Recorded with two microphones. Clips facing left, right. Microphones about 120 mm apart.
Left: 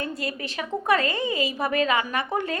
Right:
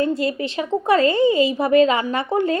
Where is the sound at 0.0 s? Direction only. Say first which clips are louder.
Right 10 dB; 25° right (ahead or behind).